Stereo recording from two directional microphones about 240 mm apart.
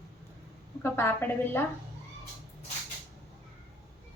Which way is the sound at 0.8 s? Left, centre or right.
Centre.